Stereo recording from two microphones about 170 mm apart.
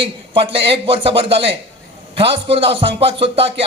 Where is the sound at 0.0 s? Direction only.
30° right (ahead or behind).